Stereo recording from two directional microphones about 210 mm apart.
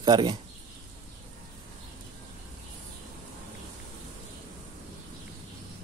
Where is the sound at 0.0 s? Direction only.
20° right (ahead or behind).